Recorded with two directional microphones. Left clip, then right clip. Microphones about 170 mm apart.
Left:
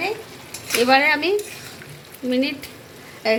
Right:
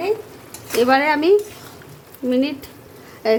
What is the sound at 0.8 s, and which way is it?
Speech, 30° right (ahead or behind).